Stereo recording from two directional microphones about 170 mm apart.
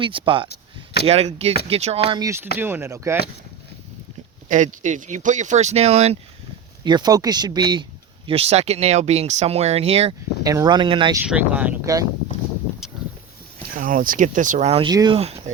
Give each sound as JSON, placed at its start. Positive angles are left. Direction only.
{"t": 0.0, "sound": "speech", "side_deg": -30}
{"t": 2.1, "sound": "speech", "side_deg": -20}
{"t": 4.4, "sound": "speech", "side_deg": -45}
{"t": 6.8, "sound": "speech", "side_deg": -25}
{"t": 8.3, "sound": "speech", "side_deg": -35}
{"t": 10.4, "sound": "speech", "side_deg": -20}
{"t": 11.3, "sound": "speech", "side_deg": -10}
{"t": 13.7, "sound": "speech", "side_deg": -55}
{"t": 14.8, "sound": "speech", "side_deg": -25}